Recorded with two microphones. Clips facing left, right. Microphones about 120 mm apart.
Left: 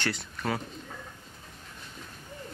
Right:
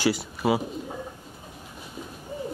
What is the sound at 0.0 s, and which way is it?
Speech, 10° right (ahead or behind).